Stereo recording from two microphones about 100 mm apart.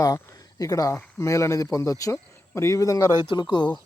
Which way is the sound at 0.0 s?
35° left (ahead or behind).